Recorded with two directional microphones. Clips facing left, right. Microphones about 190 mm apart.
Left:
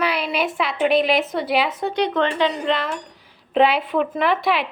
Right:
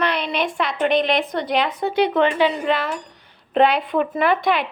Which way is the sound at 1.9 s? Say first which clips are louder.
Right 5 dB; 10° right (ahead or behind).